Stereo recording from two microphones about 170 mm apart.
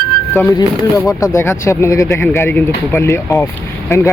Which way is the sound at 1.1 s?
20° left (ahead or behind).